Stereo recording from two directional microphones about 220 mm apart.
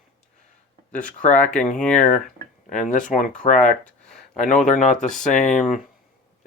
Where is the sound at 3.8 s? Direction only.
Centre (ahead or behind).